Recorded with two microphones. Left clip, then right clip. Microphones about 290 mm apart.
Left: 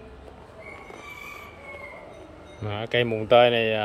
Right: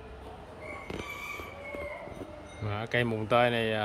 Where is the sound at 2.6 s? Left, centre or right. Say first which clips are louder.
Left 6 dB; centre.